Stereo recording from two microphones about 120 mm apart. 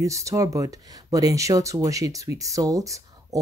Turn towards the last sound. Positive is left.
turn(degrees=-30)  # may be behind; listen again after turning